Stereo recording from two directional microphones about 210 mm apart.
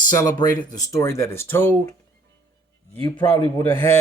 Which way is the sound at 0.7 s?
15° left (ahead or behind).